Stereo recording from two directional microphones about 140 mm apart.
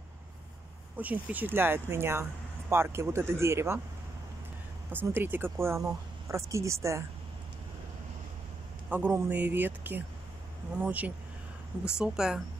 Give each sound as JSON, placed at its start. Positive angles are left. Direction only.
{"t": 0.9, "sound": "speech", "side_deg": -10}
{"t": 4.9, "sound": "speech", "side_deg": -15}
{"t": 8.8, "sound": "speech", "side_deg": -10}